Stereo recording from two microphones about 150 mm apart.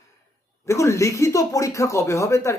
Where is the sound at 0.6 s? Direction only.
20° left (ahead or behind).